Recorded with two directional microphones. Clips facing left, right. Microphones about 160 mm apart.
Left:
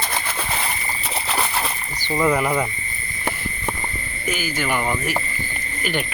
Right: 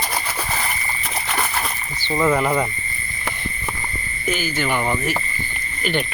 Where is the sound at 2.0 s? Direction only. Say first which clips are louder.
Right 1 dB; 5° left (ahead or behind).